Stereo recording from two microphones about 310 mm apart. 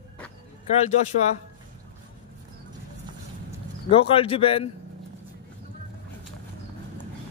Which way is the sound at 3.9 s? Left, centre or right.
Centre.